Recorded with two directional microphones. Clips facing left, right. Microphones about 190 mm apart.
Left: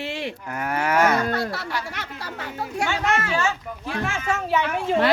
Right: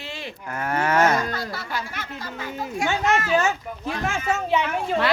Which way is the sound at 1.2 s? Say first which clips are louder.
Left 4 dB; 70° left (ahead or behind).